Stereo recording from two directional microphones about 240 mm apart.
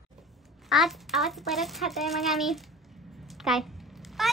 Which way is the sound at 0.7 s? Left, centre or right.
Centre.